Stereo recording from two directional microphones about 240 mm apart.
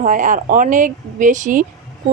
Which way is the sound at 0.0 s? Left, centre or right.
Right.